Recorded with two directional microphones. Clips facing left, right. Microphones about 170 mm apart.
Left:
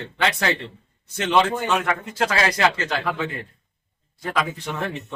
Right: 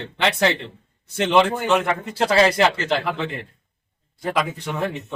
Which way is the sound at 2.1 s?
30° right (ahead or behind).